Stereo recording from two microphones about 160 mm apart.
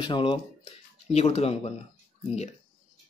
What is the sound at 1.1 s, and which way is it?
Speech, 40° left (ahead or behind).